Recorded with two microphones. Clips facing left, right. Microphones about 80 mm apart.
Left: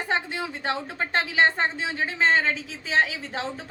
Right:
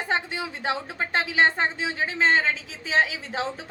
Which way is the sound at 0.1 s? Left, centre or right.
Centre.